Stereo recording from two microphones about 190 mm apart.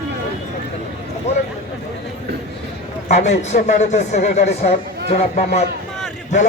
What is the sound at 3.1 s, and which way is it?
A man's voice, 35° left (ahead or behind).